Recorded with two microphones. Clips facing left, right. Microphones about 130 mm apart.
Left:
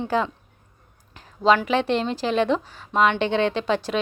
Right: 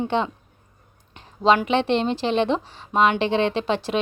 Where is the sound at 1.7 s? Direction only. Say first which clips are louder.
Right 1 dB; centre (ahead or behind).